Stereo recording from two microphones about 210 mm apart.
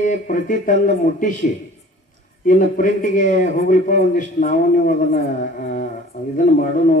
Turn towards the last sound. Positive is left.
turn(degrees=40)  # may be behind; listen again after turning